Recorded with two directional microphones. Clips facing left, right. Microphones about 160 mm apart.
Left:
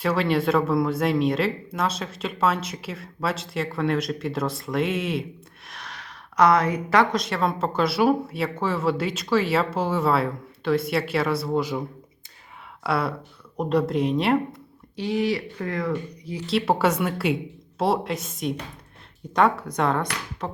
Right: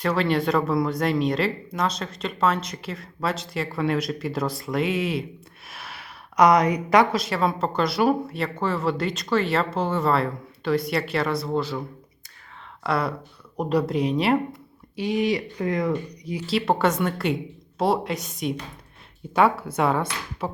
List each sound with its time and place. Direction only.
0.0 s a woman's voice: centre (ahead or behind)
7.2 s speech: centre (ahead or behind); by 11.9 s 15° left (ahead or behind)
12.8 s speech: 5° left (ahead or behind)
14.9 s speech: 15° right (ahead or behind)
16.5 s speech: 5° left (ahead or behind)